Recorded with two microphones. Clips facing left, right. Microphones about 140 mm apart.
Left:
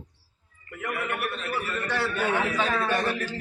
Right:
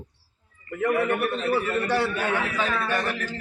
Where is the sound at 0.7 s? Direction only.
50° right (ahead or behind).